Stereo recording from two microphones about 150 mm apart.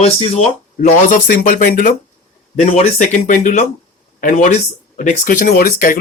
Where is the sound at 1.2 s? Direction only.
60° left (ahead or behind).